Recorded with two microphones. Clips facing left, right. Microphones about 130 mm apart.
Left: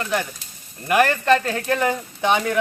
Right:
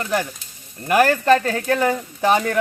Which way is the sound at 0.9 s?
Centre (ahead or behind).